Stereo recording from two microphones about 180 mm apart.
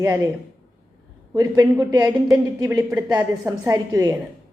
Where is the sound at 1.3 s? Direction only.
20° right (ahead or behind).